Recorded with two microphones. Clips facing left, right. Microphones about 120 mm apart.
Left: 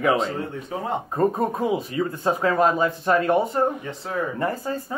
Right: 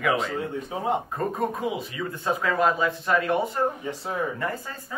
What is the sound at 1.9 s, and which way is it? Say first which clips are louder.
Speech: left 5 dB; 35° left (ahead or behind).